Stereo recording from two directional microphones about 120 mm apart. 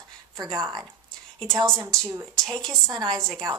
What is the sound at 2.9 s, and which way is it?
Speech, 35° right (ahead or behind).